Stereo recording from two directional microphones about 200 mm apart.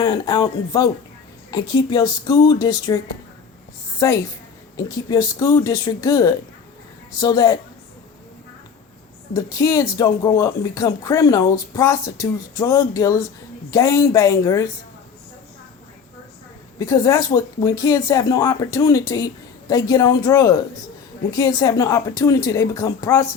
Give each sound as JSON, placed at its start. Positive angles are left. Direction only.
{"t": 0.0, "sound": "speech", "side_deg": 20}
{"t": 4.0, "sound": "speech", "side_deg": 15}
{"t": 9.3, "sound": "speech", "side_deg": 15}
{"t": 16.7, "sound": "speech", "side_deg": 15}